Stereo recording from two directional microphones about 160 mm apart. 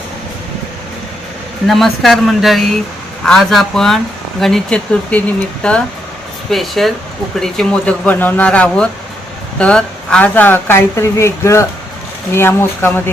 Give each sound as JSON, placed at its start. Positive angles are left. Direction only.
{"t": 1.6, "sound": "speech", "side_deg": 0}